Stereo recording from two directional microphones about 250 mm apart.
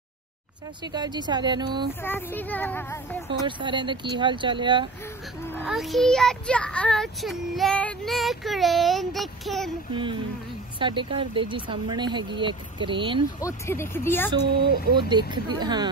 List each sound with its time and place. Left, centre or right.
0.9 s a woman's voice: centre
2.0 s speech: centre
3.3 s speech: centre
5.6 s speech: centre
10.8 s speech: centre
13.4 s speech: centre
15.0 s a woman's voice: centre